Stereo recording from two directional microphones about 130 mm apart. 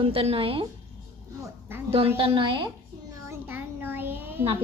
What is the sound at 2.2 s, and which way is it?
Speech, 45° right (ahead or behind).